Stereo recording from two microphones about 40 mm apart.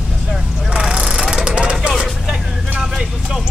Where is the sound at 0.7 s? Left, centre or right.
Centre.